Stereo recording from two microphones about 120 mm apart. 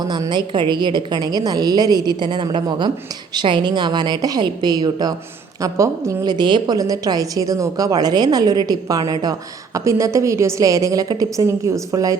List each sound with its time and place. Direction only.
0.0 s a woman's voice: 35° right (ahead or behind)